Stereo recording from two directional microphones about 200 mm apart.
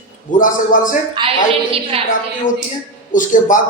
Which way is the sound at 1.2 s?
20° right (ahead or behind).